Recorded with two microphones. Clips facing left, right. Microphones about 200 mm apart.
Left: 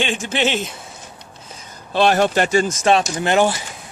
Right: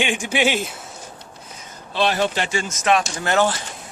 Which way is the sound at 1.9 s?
50° left (ahead or behind).